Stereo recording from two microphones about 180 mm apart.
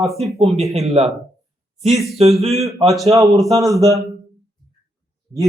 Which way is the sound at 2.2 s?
35° right (ahead or behind).